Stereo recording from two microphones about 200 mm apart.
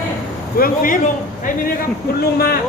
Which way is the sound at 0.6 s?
40° left (ahead or behind).